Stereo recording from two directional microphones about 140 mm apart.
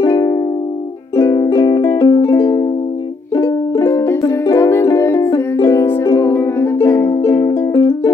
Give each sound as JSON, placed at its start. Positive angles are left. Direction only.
{"t": 0.0, "sound": "music", "side_deg": 30}
{"t": 7.7, "sound": "music", "side_deg": 35}